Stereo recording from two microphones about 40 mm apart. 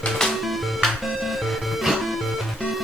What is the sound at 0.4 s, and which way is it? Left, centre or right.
Music, centre.